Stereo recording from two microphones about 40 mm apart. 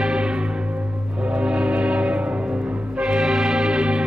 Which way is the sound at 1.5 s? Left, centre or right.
Right.